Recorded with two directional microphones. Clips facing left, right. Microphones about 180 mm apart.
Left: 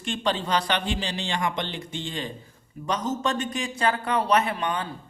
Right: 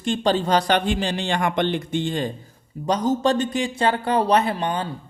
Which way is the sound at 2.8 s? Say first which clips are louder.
Right 7 dB; 35° right (ahead or behind).